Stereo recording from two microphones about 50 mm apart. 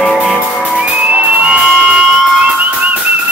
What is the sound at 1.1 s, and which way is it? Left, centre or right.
Music, centre.